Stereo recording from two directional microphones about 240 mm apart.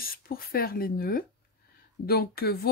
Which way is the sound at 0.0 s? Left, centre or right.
Left.